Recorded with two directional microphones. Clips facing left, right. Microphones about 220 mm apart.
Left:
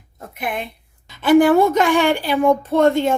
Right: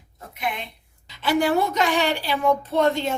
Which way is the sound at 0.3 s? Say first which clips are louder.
Left 4 dB; 50° left (ahead or behind).